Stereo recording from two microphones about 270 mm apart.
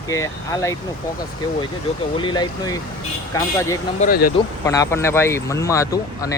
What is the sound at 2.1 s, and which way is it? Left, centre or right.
Speech, centre.